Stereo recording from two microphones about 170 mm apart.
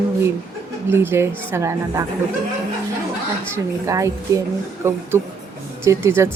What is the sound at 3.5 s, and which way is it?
Speech, 20° right (ahead or behind).